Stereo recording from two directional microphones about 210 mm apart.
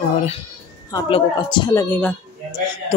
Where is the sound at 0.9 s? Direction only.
20° left (ahead or behind).